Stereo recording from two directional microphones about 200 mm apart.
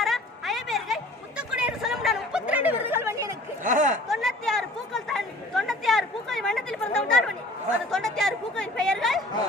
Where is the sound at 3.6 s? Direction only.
40° right (ahead or behind).